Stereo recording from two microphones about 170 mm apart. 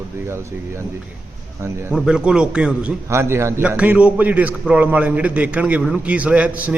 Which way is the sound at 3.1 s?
15° right (ahead or behind).